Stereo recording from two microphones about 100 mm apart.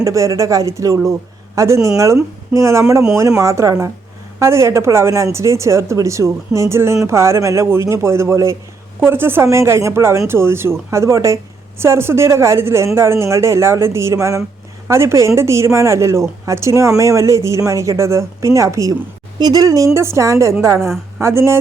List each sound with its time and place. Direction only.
0.0 s a woman's voice: 30° right (ahead or behind)